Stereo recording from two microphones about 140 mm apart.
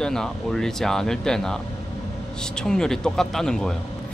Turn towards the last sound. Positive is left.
turn(degrees=5)  # may be behind; listen again after turning